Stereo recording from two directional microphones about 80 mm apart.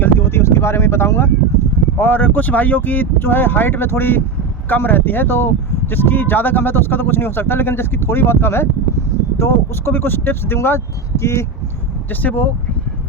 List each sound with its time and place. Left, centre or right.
0.0 s a sound: left
2.0 s speech: left
12.2 s speech: left